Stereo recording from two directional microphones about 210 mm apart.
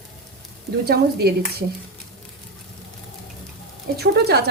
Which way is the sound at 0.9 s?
50° right (ahead or behind).